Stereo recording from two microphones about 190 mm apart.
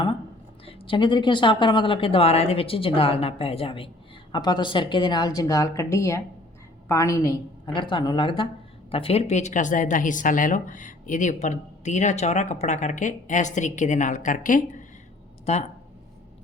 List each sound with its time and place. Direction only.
0.6 s speech: 30° left (ahead or behind)